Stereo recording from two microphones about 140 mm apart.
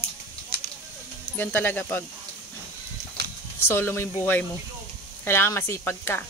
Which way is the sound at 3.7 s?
15° left (ahead or behind).